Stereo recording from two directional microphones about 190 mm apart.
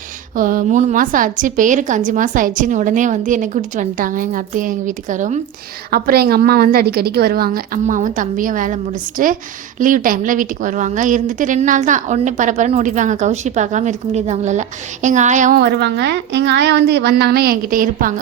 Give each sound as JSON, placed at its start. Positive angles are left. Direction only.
{"t": 0.3, "sound": "a woman's voice", "side_deg": -45}
{"t": 5.9, "sound": "a woman's voice", "side_deg": -55}
{"t": 15.6, "sound": "a woman's voice", "side_deg": -60}